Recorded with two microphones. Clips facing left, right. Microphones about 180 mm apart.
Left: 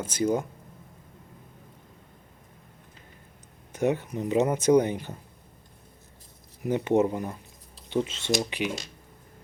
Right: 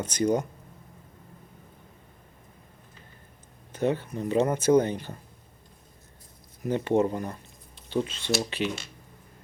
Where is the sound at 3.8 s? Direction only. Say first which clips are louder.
Left 1 dB; 15° left (ahead or behind).